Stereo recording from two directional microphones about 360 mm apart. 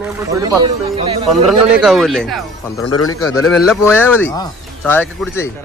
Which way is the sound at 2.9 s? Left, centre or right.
Left.